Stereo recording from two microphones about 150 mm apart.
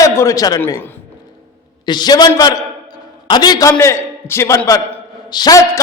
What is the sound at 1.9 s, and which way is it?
A man's voice, 30° left (ahead or behind).